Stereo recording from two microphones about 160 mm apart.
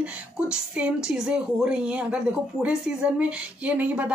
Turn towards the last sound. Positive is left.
turn(degrees=-10)  # may be behind; listen again after turning